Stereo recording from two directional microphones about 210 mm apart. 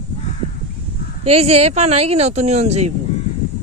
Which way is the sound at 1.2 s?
30° right (ahead or behind).